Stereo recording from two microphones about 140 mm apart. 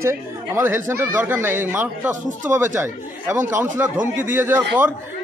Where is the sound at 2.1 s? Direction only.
65° right (ahead or behind).